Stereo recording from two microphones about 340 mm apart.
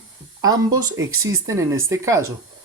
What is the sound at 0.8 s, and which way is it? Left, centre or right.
Speech, right.